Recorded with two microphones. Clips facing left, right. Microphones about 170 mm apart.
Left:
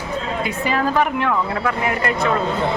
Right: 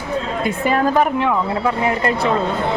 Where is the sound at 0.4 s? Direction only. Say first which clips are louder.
Right 4 dB; 45° right (ahead or behind).